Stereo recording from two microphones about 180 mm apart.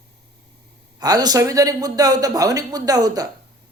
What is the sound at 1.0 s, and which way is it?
Speech, 20° right (ahead or behind).